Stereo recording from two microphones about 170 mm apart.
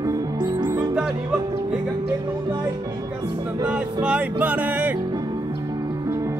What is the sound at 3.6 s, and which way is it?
Music, 5° right (ahead or behind).